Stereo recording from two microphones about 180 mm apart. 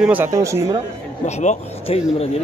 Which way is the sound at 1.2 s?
40° left (ahead or behind).